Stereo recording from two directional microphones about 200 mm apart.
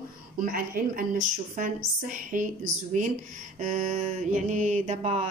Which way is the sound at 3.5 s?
40° right (ahead or behind).